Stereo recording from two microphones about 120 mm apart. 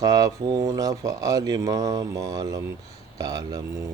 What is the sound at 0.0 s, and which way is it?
Speech, 30° right (ahead or behind).